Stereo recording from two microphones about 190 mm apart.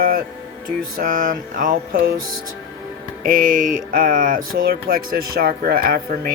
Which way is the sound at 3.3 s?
45° right (ahead or behind).